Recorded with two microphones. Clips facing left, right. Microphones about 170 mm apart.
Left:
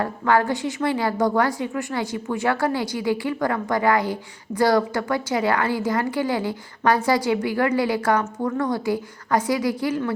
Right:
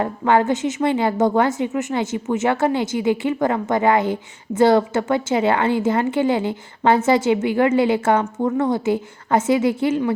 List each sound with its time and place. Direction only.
0.0 s a woman's voice: 20° right (ahead or behind)